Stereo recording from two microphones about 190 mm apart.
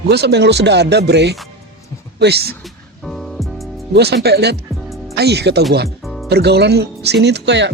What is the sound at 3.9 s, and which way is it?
Speech, 60° right (ahead or behind).